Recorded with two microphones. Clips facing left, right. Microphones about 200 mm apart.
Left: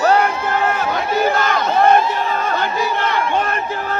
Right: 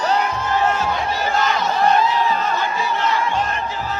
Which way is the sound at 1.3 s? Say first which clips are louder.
Left 2 dB; 55° left (ahead or behind).